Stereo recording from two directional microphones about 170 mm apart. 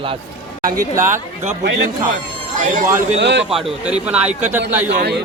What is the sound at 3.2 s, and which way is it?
Speech, 90° right.